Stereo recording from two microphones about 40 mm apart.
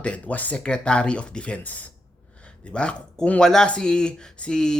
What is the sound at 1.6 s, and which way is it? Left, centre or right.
Speech, left.